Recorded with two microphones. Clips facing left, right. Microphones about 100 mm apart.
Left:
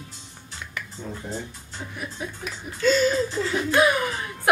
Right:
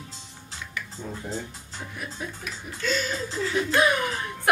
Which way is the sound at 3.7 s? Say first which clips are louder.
Left 3 dB; 5° left (ahead or behind).